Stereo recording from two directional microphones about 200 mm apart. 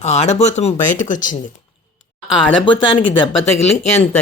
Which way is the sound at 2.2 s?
25° left (ahead or behind).